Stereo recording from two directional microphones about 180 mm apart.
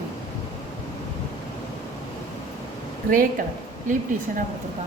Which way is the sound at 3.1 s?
50° right (ahead or behind).